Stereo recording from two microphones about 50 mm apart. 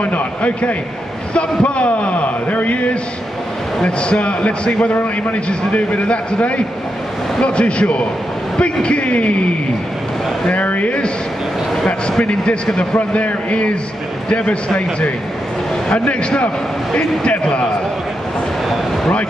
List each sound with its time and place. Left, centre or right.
0.0 s a man's voice: left
11.7 s speech: centre
12.9 s a man's voice: left